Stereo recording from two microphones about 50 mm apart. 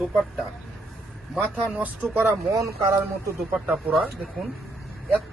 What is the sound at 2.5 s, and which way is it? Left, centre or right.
Speech, right.